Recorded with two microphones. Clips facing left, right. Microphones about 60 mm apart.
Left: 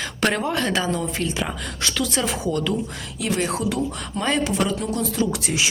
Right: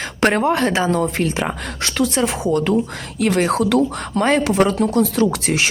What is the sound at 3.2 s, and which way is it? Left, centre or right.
A woman's voice, right.